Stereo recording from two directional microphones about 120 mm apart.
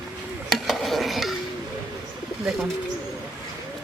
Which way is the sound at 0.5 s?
Centre (ahead or behind).